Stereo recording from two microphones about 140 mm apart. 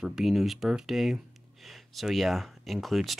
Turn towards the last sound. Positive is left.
turn(degrees=0)  # may be behind; listen again after turning